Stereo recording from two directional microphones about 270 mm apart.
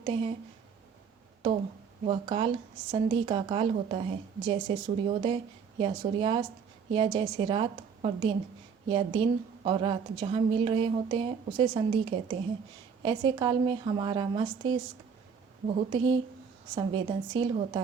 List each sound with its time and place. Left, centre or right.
0.0 s a woman's voice: right
2.0 s a woman's voice: centre